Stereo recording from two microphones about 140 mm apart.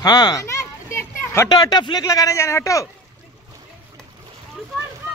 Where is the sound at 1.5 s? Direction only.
30° left (ahead or behind).